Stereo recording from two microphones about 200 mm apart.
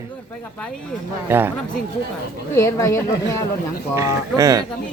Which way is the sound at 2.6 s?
15° left (ahead or behind).